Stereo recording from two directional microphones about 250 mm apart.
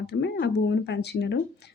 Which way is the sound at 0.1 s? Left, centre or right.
Left.